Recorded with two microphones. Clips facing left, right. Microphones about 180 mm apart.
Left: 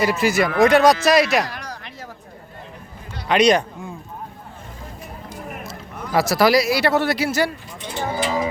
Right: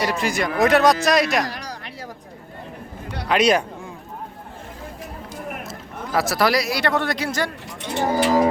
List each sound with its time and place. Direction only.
0.0 s speech: 5° left (ahead or behind)
3.2 s speech: 5° right (ahead or behind)
6.1 s speech: centre (ahead or behind)
7.8 s cattle: 65° right (ahead or behind)
8.2 s music: 55° right (ahead or behind)